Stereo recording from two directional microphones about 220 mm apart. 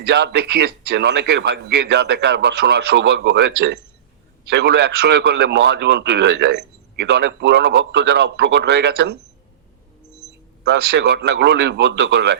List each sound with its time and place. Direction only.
0.0 s speech: 45° right (ahead or behind)
10.6 s speech: 50° right (ahead or behind)